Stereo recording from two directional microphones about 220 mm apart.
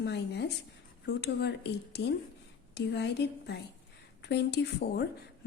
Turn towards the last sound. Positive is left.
turn(degrees=50)  # may be behind; listen again after turning